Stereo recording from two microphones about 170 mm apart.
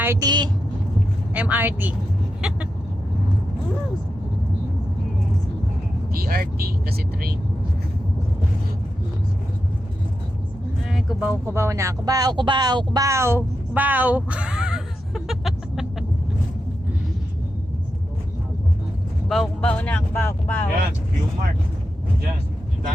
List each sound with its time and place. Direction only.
0.0 s a woman's voice: 15° right (ahead or behind)
0.3 s a woman's voice: 25° right (ahead or behind)
1.3 s speech: 10° right (ahead or behind)
6.1 s speech: 60° right (ahead or behind)
10.8 s speech: 5° right (ahead or behind)
19.3 s speech: 5° left (ahead or behind)